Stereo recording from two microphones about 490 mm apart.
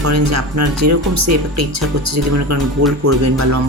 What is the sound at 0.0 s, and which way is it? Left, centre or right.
Speech, right.